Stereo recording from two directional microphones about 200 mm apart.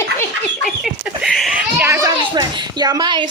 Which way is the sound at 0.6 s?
Centre (ahead or behind).